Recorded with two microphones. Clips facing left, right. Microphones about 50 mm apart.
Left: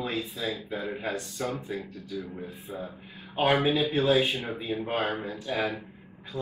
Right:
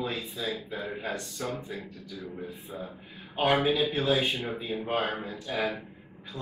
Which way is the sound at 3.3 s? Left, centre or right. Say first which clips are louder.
Left 1 dB; left.